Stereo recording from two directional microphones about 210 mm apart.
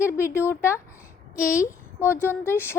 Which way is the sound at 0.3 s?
10° left (ahead or behind).